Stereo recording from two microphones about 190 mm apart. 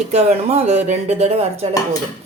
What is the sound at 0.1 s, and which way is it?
Speech, 35° right (ahead or behind).